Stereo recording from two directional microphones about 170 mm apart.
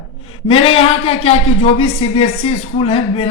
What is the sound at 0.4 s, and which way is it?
Speech, 35° left (ahead or behind).